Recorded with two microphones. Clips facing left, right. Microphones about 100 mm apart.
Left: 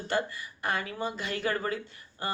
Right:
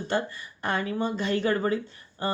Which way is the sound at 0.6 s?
30° right (ahead or behind).